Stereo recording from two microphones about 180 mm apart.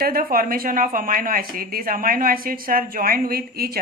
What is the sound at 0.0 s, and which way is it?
Speech, 55° right (ahead or behind).